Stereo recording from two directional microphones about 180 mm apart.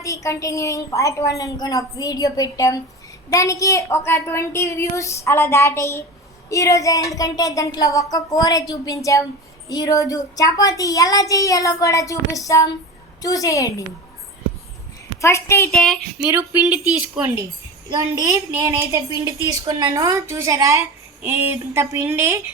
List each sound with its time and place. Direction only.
0.0 s a woman's voice: 15° left (ahead or behind)
15.2 s a woman's voice: 15° left (ahead or behind)
15.7 s a sound: centre (ahead or behind)
16.3 s a woman's voice: 5° right (ahead or behind)